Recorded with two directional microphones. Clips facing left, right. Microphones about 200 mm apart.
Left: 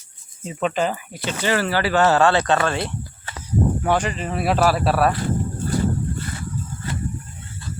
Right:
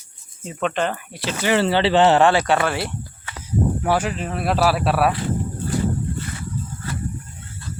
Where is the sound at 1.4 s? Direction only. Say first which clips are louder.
Right 3 dB; 20° right (ahead or behind).